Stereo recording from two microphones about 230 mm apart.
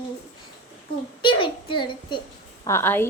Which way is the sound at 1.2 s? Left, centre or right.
Left.